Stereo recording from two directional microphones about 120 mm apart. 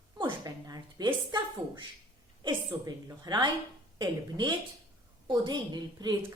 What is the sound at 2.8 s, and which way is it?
A woman's voice, 35° right (ahead or behind).